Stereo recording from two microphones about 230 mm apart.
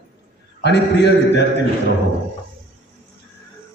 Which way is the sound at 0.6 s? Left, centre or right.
Left.